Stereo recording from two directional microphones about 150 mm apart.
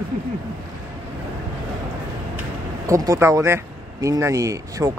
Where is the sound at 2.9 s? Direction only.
20° right (ahead or behind).